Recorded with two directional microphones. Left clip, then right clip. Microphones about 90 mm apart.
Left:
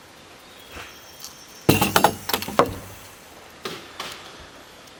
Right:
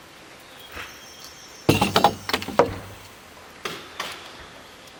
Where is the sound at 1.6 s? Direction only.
40° left (ahead or behind).